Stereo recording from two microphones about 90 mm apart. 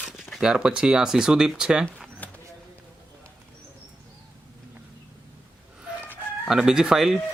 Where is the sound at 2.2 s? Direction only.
20° left (ahead or behind).